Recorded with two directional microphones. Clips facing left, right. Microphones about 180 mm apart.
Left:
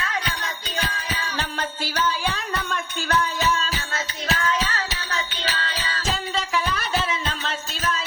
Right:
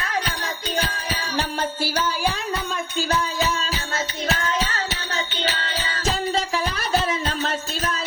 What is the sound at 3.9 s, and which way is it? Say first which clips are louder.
Music: right 3 dB; 40° right (ahead or behind).